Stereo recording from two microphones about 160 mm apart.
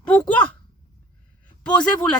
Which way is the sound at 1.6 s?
5° left (ahead or behind).